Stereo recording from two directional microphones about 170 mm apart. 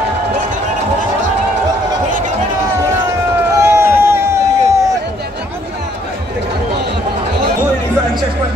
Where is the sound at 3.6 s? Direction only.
15° right (ahead or behind).